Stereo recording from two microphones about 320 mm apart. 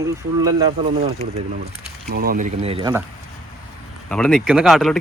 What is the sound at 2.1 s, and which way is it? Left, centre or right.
Speech, right.